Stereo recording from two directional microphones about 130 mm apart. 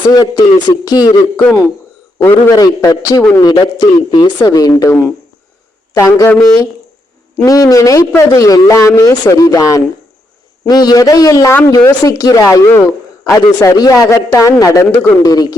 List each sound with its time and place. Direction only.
0.1 s a man's voice: 30° left (ahead or behind)
1.2 s a man's voice: 10° left (ahead or behind)
2.6 s a man's voice: 30° left (ahead or behind)
4.9 s a man's voice: 15° left (ahead or behind)
7.3 s a man's voice: 30° left (ahead or behind)